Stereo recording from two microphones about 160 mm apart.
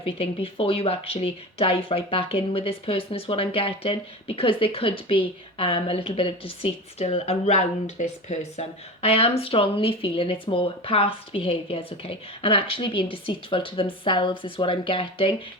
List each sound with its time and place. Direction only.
0.0 s speech: 35° left (ahead or behind)